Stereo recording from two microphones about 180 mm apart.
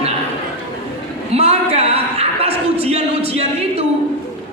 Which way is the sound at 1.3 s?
35° right (ahead or behind).